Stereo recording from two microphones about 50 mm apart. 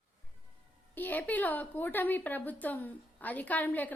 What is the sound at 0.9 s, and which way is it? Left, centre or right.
A woman's voice, left.